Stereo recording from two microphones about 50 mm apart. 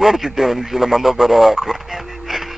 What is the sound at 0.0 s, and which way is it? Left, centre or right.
Radio, centre.